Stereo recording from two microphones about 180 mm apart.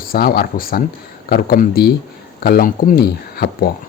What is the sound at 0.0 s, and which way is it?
Speech, 55° left (ahead or behind).